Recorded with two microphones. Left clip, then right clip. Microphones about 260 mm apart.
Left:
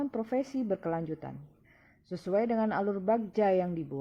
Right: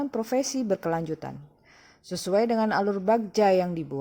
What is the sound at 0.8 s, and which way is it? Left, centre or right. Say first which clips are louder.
A woman's voice: right 6 dB; right.